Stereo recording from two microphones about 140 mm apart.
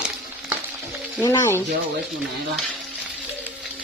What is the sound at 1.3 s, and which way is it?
Speech, 20° left (ahead or behind).